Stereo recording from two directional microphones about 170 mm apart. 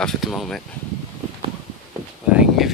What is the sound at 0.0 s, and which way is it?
Speech, centre (ahead or behind).